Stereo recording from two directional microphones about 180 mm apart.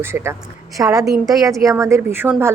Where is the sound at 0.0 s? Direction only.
15° right (ahead or behind).